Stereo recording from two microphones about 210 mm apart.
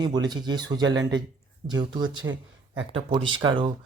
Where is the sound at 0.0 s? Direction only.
20° right (ahead or behind).